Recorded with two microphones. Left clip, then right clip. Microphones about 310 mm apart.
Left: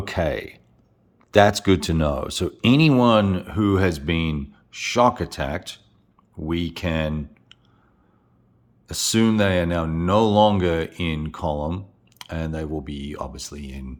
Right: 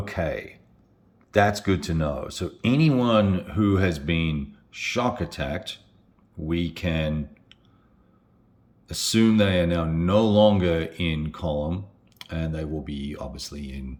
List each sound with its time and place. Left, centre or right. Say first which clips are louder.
0.0 s speech: left 4 dB; left
8.9 s speech: left 1 dB; centre